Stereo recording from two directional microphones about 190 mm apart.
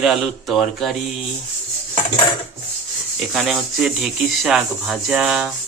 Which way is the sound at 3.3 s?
Centre (ahead or behind).